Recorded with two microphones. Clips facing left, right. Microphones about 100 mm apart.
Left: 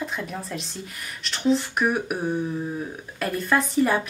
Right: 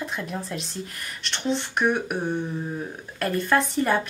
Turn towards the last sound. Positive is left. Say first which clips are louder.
# left 1 dB
turn(degrees=5)  # may be behind; listen again after turning